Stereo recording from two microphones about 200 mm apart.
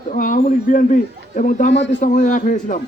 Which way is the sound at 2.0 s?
40° left (ahead or behind).